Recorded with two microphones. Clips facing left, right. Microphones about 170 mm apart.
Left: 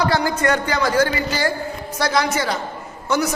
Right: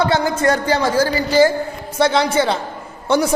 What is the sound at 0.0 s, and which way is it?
A man's voice, 20° right (ahead or behind).